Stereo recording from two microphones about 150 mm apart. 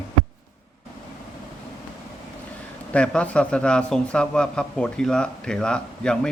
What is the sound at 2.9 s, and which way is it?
A man's voice, 5° left (ahead or behind).